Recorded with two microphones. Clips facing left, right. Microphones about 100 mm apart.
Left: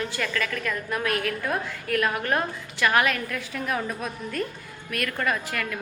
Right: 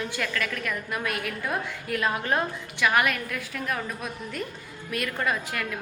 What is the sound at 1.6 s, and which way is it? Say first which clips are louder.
Speech: left 2 dB; 15° right (ahead or behind).